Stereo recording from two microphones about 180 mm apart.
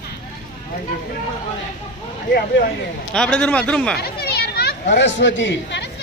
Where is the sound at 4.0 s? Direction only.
65° left (ahead or behind).